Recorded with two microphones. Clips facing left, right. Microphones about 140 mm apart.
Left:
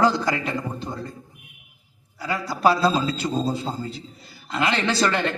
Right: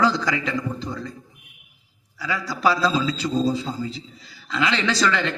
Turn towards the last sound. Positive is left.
turn(degrees=50)  # may be behind; listen again after turning